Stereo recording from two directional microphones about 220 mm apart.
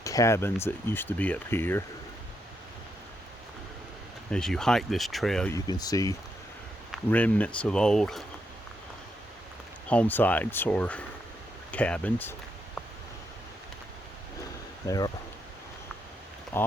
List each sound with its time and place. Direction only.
0.0 s speech: 15° left (ahead or behind)
4.3 s speech: 5° left (ahead or behind)
5.6 s speech: 20° left (ahead or behind); by 8.2 s centre (ahead or behind)
9.9 s speech: 5° left (ahead or behind)
14.8 s speech: 15° left (ahead or behind)
16.5 s speech: 10° left (ahead or behind)